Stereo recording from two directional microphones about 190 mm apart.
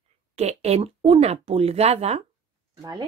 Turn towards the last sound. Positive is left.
turn(degrees=-20)  # may be behind; listen again after turning